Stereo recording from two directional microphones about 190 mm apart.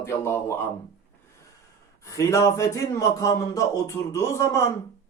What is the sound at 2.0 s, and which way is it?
A man's voice, 15° left (ahead or behind).